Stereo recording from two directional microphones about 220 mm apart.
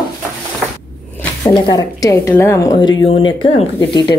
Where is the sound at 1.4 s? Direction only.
20° left (ahead or behind).